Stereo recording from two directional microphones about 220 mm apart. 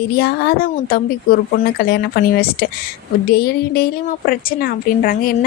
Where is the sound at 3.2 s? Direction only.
45° left (ahead or behind).